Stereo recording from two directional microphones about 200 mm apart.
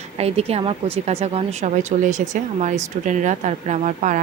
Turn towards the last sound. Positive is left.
turn(degrees=-40)  # may be behind; listen again after turning